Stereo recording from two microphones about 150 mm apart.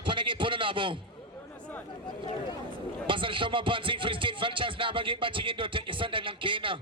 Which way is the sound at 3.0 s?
35° right (ahead or behind).